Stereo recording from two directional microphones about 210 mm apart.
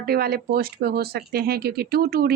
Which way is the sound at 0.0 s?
45° right (ahead or behind).